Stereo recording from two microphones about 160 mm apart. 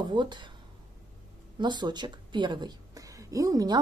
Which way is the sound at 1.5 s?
30° right (ahead or behind).